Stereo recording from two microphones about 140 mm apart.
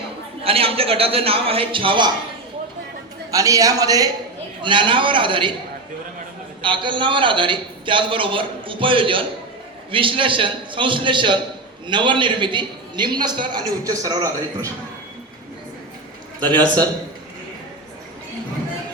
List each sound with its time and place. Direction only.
0.4 s a man's voice: 45° right (ahead or behind)
3.3 s speech: 25° right (ahead or behind)
4.6 s a man's voice: 35° right (ahead or behind)
6.6 s a man's voice: 35° right (ahead or behind)
16.5 s speech: 30° right (ahead or behind)